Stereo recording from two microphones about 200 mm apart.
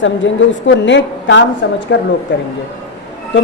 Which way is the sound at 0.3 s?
70° left (ahead or behind).